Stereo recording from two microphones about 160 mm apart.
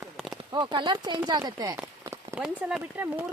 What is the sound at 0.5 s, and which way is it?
Speech, 30° right (ahead or behind).